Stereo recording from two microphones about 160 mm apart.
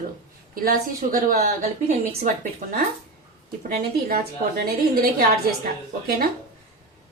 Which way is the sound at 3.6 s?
70° right (ahead or behind).